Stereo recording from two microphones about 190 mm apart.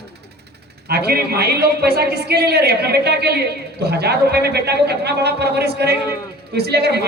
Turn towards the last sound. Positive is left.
turn(degrees=-60)  # may be behind; listen again after turning